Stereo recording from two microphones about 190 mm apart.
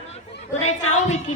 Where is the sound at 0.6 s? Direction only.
35° left (ahead or behind).